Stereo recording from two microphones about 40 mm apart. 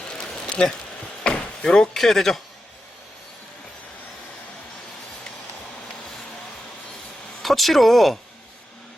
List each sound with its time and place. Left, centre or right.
0.2 s a sound: left
1.2 s chop: left
1.9 s a man's voice: centre
7.4 s speech: centre